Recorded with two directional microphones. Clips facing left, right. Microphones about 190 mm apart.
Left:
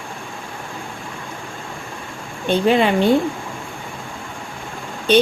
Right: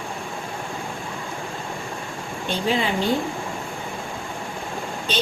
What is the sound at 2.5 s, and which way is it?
Speech, 60° left (ahead or behind).